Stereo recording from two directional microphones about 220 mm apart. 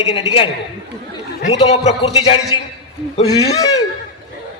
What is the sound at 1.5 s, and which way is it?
Speech, 30° left (ahead or behind).